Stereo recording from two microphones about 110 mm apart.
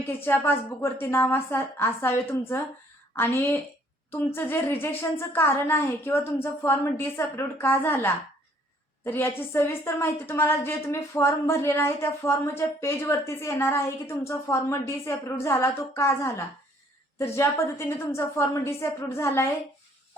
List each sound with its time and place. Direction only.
0.0 s a woman's voice: 20° left (ahead or behind)